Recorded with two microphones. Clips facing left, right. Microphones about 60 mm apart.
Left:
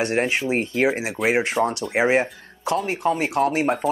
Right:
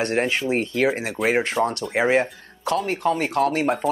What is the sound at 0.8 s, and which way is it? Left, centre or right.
Speech, centre.